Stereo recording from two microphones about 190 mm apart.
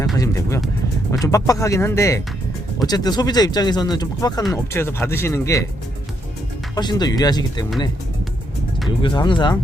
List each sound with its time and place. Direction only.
0.2 s speech: 15° left (ahead or behind)
6.7 s speech: 20° left (ahead or behind)
9.0 s speech: 25° left (ahead or behind)